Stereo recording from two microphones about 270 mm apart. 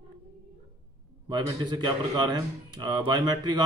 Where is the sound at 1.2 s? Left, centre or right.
Centre.